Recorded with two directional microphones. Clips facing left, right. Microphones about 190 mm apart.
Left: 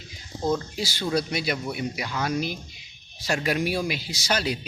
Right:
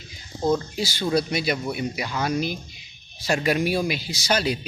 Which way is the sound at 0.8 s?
25° right (ahead or behind).